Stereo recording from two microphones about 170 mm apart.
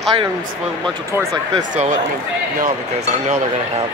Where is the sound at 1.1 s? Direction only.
20° right (ahead or behind).